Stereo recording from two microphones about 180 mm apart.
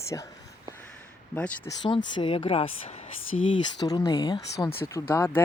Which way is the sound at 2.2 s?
30° left (ahead or behind).